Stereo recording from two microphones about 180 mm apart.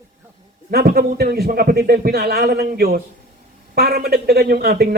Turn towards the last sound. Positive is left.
turn(degrees=-60)  # may be behind; listen again after turning